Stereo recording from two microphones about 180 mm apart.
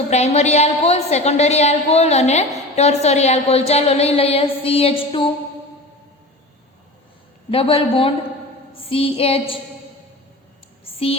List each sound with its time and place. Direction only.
0.1 s a woman's voice: 35° left (ahead or behind)
7.5 s a woman's voice: 30° left (ahead or behind)